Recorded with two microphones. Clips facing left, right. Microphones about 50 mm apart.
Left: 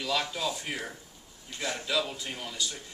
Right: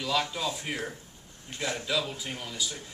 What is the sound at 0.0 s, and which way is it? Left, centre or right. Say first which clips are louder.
Speech: right 1 dB; centre.